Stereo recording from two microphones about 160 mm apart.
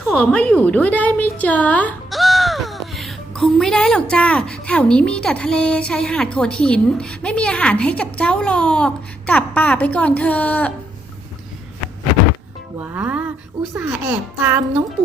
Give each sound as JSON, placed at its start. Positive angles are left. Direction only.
{"t": 0.1, "sound": "a woman's voice", "side_deg": 5}
{"t": 12.8, "sound": "a child's voice", "side_deg": -10}